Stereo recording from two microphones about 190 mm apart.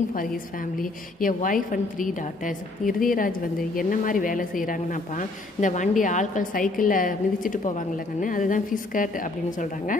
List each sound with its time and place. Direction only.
0.1 s a woman's voice: 45° left (ahead or behind)